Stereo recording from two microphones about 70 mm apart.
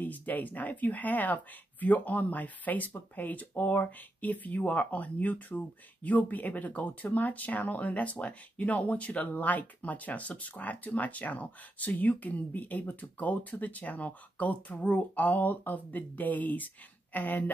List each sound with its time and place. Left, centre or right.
0.0 s speech: left